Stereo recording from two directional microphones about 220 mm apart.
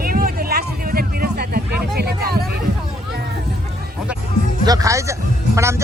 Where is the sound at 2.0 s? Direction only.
45° right (ahead or behind).